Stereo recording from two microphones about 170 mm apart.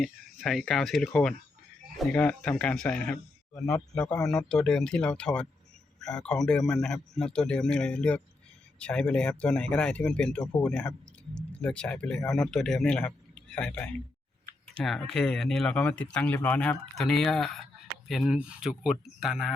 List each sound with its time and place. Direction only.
0.0 s a man's voice: centre (ahead or behind)